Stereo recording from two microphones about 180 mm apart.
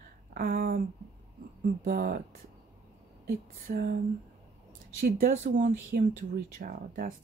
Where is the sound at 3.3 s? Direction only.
50° right (ahead or behind).